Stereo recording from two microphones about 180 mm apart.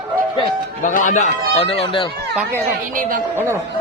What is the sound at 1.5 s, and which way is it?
Speech, 30° left (ahead or behind).